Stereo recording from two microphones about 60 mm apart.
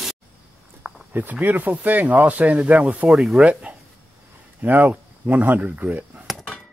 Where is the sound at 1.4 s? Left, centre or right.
Right.